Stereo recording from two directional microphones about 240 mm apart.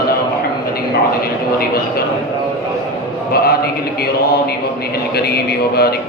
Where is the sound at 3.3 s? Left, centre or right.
Left.